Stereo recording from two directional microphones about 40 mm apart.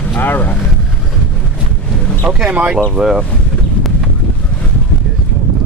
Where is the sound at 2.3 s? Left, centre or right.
Right.